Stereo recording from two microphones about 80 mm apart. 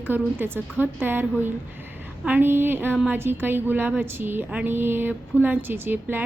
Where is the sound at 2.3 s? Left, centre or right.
Right.